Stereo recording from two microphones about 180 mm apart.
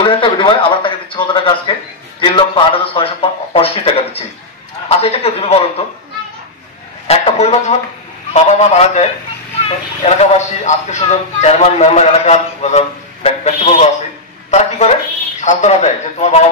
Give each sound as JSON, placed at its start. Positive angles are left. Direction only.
{"t": 0.0, "sound": "a sound", "side_deg": 25}
{"t": 2.1, "sound": "speech", "side_deg": 30}
{"t": 7.1, "sound": "a man's voice", "side_deg": 35}